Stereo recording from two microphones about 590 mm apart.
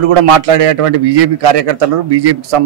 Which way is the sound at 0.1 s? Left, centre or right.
Right.